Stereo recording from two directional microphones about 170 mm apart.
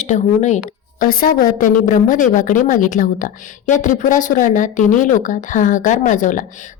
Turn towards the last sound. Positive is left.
turn(degrees=45)  # may be behind; listen again after turning